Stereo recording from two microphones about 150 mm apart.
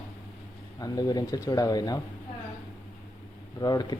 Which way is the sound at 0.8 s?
25° left (ahead or behind).